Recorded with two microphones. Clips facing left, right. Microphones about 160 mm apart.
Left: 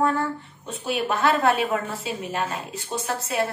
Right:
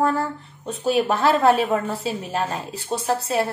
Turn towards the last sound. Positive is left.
turn(degrees=-35)  # may be behind; listen again after turning